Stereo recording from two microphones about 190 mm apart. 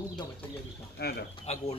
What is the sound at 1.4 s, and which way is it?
Speech, 35° left (ahead or behind).